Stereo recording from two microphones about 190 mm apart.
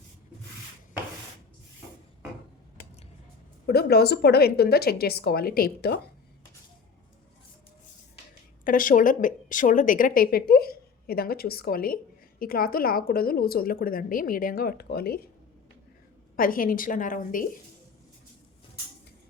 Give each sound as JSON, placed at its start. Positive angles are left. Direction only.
{"t": 3.7, "sound": "a woman's voice", "side_deg": 55}
{"t": 8.6, "sound": "a woman's voice", "side_deg": 45}
{"t": 16.3, "sound": "a woman's voice", "side_deg": 50}